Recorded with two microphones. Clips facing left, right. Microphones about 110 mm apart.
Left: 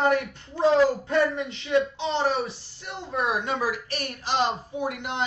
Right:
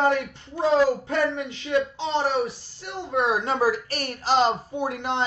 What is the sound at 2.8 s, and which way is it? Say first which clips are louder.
Speech: right 4 dB; 25° right (ahead or behind).